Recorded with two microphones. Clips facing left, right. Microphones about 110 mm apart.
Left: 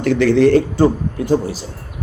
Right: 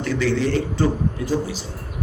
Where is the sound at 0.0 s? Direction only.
55° left (ahead or behind).